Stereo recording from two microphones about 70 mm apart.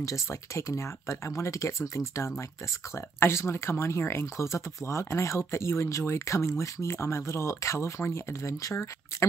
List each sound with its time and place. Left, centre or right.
0.0 s speech: left